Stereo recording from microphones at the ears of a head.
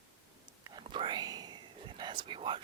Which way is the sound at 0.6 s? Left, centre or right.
Right.